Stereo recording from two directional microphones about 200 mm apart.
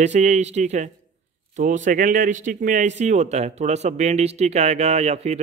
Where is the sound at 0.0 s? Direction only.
35° right (ahead or behind).